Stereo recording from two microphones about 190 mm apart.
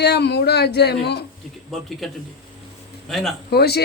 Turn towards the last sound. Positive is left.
turn(degrees=55)  # may be behind; listen again after turning